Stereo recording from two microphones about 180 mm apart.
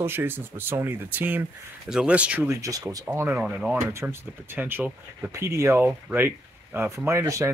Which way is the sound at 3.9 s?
15° right (ahead or behind).